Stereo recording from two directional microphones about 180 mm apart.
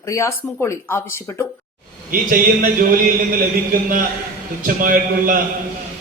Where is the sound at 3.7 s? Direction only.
50° right (ahead or behind).